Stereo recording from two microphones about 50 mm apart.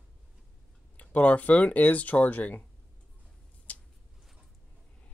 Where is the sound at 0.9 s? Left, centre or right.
Left.